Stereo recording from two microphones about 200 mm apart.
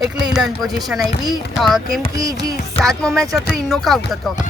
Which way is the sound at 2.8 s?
5° left (ahead or behind).